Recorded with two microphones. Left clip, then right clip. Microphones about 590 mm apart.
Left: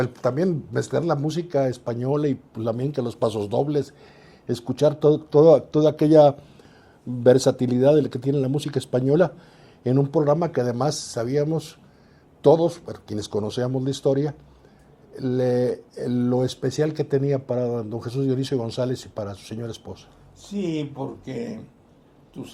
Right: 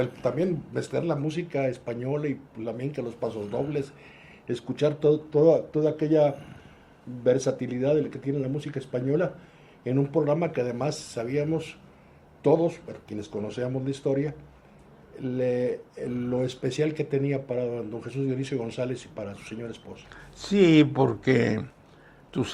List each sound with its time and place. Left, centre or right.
0.0 s speech: left
4.4 s speech: left
12.4 s speech: left
20.4 s speech: right